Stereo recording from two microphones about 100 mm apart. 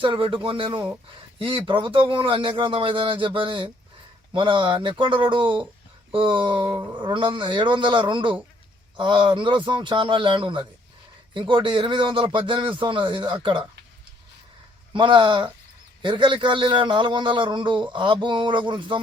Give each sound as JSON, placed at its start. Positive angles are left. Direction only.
{"t": 0.0, "sound": "a man's voice", "side_deg": -55}
{"t": 14.9, "sound": "a man's voice", "side_deg": -55}